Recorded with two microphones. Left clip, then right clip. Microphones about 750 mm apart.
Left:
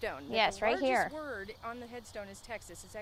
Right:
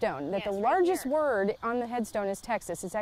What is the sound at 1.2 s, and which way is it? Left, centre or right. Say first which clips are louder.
Speech: right 13 dB; right.